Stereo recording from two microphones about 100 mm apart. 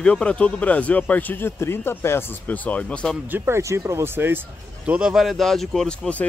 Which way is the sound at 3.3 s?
25° right (ahead or behind).